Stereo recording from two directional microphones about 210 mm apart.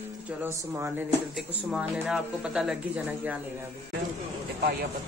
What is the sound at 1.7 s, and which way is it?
Speech, 5° right (ahead or behind).